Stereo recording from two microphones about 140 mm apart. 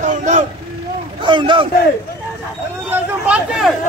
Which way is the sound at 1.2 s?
35° right (ahead or behind).